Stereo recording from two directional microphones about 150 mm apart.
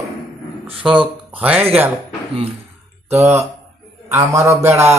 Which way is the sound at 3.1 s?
20° right (ahead or behind).